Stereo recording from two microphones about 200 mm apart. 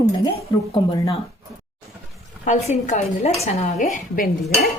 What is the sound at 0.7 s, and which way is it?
Speech, 25° left (ahead or behind).